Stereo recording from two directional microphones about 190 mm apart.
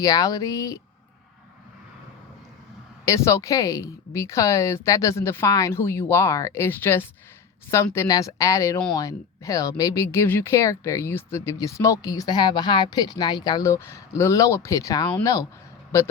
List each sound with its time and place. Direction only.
0.0 s speech: 20° left (ahead or behind)
3.1 s speech: 15° left (ahead or behind)